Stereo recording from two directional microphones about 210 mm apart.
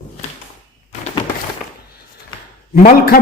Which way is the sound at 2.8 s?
45° left (ahead or behind).